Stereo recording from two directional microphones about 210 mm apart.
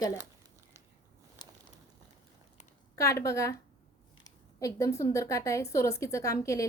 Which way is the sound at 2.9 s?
15° left (ahead or behind).